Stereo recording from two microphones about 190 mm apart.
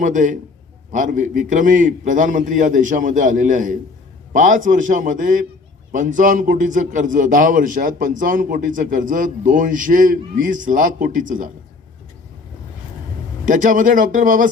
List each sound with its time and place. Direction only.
0.0 s a man's voice: 40° right (ahead or behind)
13.4 s a man's voice: 45° right (ahead or behind)